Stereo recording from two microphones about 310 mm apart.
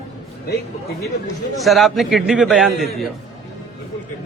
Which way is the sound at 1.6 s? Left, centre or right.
Centre.